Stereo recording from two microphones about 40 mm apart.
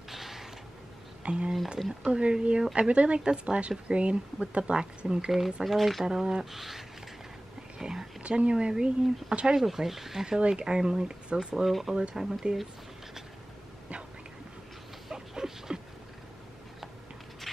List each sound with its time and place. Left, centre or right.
0.1 s creak: centre
1.2 s speech: right
5.3 s speech: centre
6.0 s speech: centre
6.5 s speech: centre
7.8 s a sound: centre
8.2 s speech: right
9.6 s speech: centre
11.5 s speech: centre
11.9 s speech: right
15.0 s dog: centre